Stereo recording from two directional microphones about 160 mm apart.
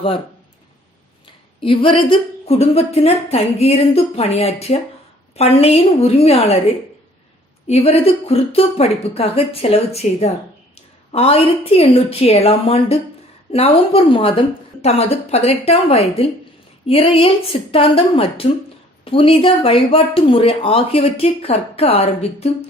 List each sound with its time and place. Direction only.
1.6 s speech: 35° left (ahead or behind)
7.7 s speech: 40° left (ahead or behind)